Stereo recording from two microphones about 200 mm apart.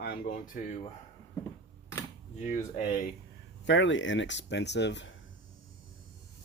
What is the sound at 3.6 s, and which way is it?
Speech, 65° left (ahead or behind).